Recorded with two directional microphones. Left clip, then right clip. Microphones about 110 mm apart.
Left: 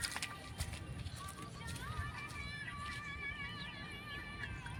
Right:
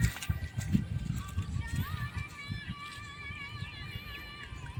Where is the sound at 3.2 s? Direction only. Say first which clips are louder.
Right 4 dB; 40° right (ahead or behind).